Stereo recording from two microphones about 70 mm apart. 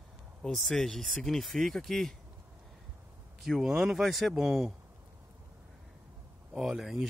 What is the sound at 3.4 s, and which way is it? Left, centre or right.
Speech, centre.